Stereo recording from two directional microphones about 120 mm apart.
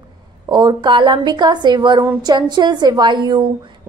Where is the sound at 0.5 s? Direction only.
40° right (ahead or behind).